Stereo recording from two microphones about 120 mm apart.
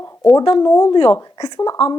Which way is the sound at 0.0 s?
25° left (ahead or behind).